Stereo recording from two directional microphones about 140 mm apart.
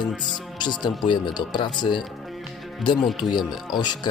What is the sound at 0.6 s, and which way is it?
Speech, 30° left (ahead or behind).